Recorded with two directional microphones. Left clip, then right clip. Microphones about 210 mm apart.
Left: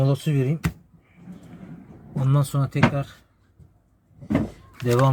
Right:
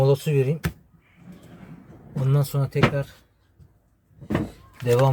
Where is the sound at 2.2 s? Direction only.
15° right (ahead or behind).